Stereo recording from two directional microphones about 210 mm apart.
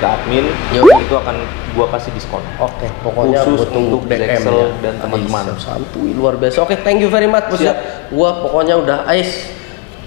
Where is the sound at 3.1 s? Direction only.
30° left (ahead or behind).